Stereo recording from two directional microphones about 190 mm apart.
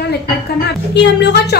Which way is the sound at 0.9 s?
65° left (ahead or behind).